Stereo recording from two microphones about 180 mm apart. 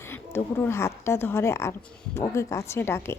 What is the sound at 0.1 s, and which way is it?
A woman's voice, 10° left (ahead or behind).